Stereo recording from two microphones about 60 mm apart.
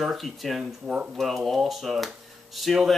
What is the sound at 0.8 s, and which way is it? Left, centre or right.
Speech, centre.